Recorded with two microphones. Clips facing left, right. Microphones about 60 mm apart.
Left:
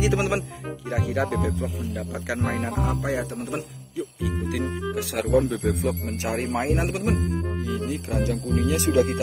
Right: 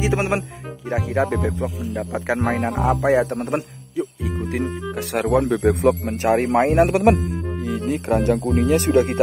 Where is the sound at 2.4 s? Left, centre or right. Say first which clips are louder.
Right 4 dB; centre.